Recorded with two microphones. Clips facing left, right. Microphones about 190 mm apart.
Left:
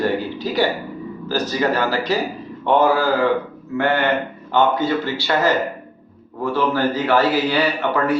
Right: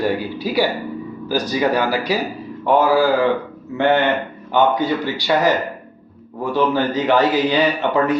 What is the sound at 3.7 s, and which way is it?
A man's voice, 20° right (ahead or behind).